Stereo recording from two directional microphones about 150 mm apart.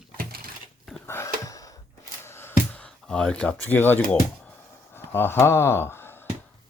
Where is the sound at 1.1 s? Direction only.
20° left (ahead or behind).